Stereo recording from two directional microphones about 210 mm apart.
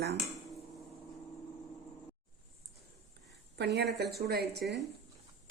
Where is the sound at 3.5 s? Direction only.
55° right (ahead or behind).